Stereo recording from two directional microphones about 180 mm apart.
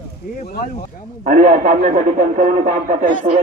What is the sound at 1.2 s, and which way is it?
Speech, 50° right (ahead or behind).